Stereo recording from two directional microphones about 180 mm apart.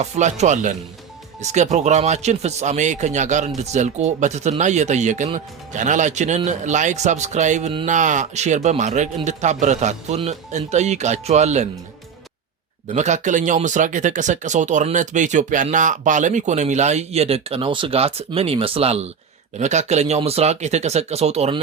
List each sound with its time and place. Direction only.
0.0 s speech: 40° right (ahead or behind)
12.9 s speech: 40° right (ahead or behind)